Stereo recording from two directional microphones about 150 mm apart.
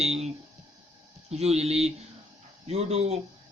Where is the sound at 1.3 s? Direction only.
45° right (ahead or behind).